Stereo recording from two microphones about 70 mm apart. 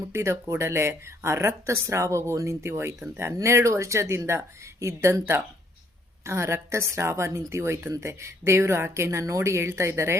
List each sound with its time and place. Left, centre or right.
0.1 s speech: right
6.2 s speech: right